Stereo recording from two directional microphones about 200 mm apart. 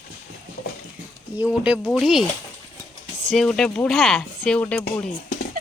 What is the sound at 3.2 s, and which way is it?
Speech, 5° left (ahead or behind).